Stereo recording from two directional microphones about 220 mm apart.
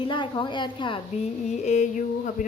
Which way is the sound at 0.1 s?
20° left (ahead or behind).